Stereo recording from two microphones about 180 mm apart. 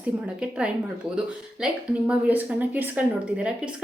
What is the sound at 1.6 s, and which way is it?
A woman's voice, 5° right (ahead or behind).